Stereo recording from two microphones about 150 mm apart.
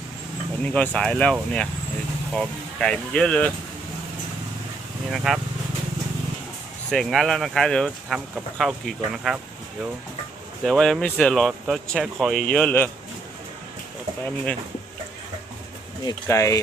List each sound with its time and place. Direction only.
0.6 s speech: 10° left (ahead or behind)
5.1 s speech: centre (ahead or behind)
6.9 s speech: centre (ahead or behind)
10.6 s speech: centre (ahead or behind)
16.2 s speech: 20° left (ahead or behind)